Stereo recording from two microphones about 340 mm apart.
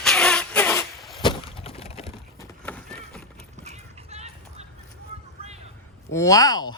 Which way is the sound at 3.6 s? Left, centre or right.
Centre.